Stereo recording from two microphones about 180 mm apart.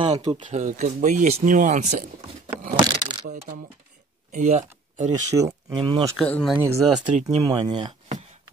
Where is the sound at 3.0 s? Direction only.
25° right (ahead or behind).